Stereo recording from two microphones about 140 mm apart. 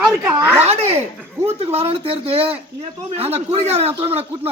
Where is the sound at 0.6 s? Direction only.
45° right (ahead or behind).